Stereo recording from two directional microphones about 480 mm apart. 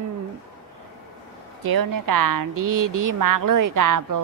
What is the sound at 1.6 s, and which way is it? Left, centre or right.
Speech, right.